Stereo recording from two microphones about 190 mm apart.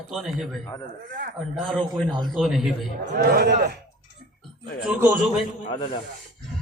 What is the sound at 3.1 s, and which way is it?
Speech, 55° right (ahead or behind).